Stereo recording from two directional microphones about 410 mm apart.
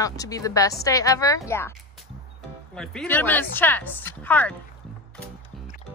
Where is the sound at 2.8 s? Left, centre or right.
Centre.